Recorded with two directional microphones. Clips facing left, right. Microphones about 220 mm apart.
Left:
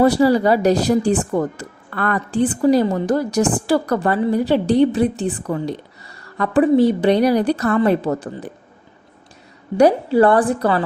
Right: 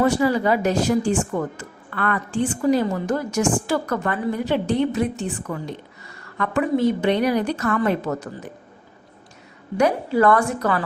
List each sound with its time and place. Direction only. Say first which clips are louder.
0.0 s a woman's voice: left 5 dB; 35° left (ahead or behind)
9.7 s a woman's voice: left 6 dB; 30° left (ahead or behind)